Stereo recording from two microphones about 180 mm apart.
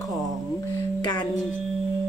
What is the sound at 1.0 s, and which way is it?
Music, 25° left (ahead or behind).